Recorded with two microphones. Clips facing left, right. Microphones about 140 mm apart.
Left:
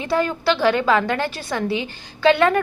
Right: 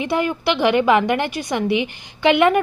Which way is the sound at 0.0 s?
15° right (ahead or behind).